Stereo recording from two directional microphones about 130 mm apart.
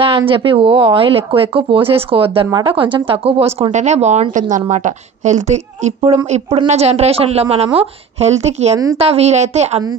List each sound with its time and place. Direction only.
0.3 s speech: 45° right (ahead or behind)
3.7 s a woman's voice: 60° right (ahead or behind)